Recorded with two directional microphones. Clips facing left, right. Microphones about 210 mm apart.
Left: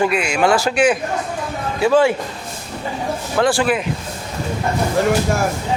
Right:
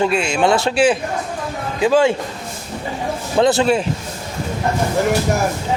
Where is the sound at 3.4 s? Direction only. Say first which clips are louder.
Right 3 dB; 20° right (ahead or behind).